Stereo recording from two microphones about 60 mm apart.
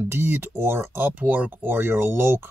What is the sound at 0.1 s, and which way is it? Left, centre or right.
Speech, right.